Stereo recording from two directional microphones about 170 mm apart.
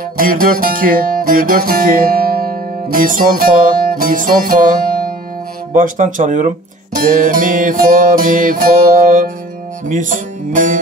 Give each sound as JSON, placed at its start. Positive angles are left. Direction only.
{"t": 0.2, "sound": "music", "side_deg": -55}